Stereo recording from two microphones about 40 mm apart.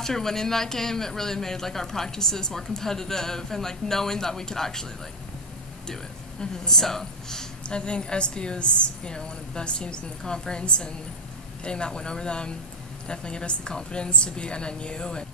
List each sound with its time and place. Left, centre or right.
0.0 s speech: centre
6.4 s speech: centre
7.6 s a woman's voice: left